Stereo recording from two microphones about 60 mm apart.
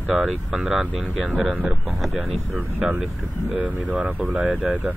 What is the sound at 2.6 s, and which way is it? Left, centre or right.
Speech, centre.